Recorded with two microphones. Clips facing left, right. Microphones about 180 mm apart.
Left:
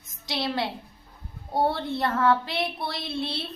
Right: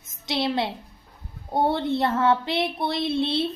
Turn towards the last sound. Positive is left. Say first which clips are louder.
# right 8 dB
turn(degrees=-25)  # may be behind; listen again after turning